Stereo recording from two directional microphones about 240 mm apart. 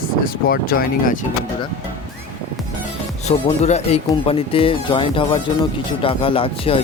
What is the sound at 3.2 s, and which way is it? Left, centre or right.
Speech, left.